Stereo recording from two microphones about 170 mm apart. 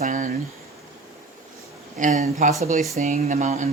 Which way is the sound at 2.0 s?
45° right (ahead or behind).